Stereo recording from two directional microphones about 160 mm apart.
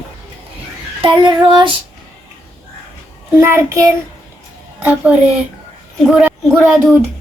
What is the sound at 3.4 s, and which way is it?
Speech, 15° right (ahead or behind).